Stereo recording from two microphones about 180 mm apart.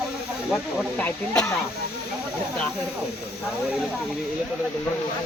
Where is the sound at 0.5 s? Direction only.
5° left (ahead or behind).